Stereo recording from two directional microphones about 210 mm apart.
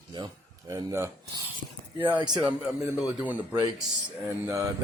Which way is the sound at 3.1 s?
5° right (ahead or behind).